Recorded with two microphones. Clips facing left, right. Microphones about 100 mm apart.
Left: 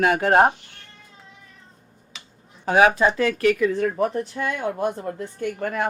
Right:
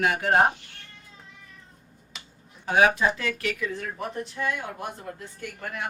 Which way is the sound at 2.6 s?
60° left (ahead or behind).